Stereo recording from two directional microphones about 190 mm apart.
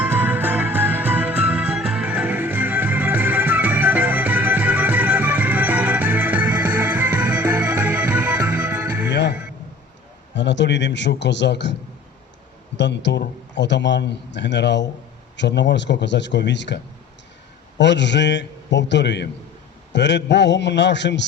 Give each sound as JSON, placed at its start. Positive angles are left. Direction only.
{"t": 0.0, "sound": "music", "side_deg": -10}
{"t": 9.0, "sound": "music", "side_deg": 65}
{"t": 10.3, "sound": "a man's voice", "side_deg": 70}